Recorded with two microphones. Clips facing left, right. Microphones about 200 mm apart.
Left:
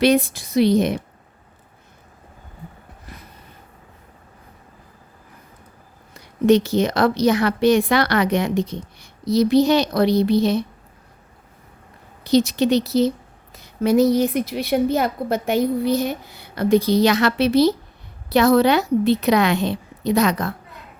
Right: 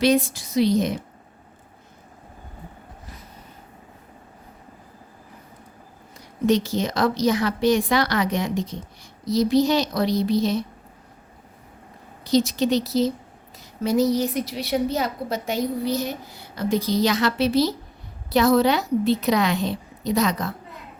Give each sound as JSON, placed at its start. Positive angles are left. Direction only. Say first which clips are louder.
{"t": 0.0, "sound": "a woman's voice", "louder": "left 3 dB", "side_deg": 60}
{"t": 6.1, "sound": "a woman's voice", "louder": "left 5 dB", "side_deg": 65}
{"t": 12.2, "sound": "a woman's voice", "louder": "left 3 dB", "side_deg": 65}